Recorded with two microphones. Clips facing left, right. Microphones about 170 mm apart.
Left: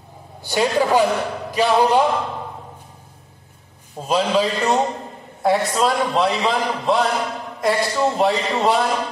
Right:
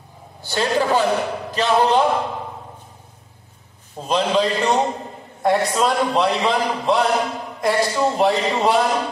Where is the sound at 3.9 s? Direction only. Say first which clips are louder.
Even; 5° left (ahead or behind).